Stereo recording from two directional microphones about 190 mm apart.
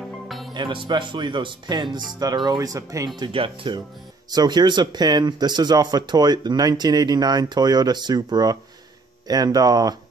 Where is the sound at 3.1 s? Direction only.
25° right (ahead or behind).